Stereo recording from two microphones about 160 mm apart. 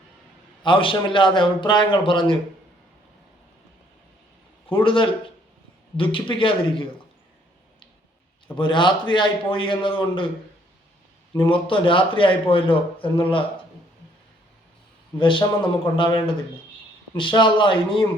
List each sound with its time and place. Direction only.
0.6 s a man's voice: 30° left (ahead or behind)
4.8 s a man's voice: 30° left (ahead or behind)
8.5 s a man's voice: 30° left (ahead or behind)
11.3 s a man's voice: 35° left (ahead or behind)
15.2 s a man's voice: 30° left (ahead or behind)